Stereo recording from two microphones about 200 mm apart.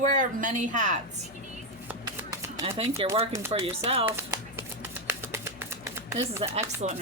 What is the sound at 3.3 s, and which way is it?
Speech, 10° right (ahead or behind).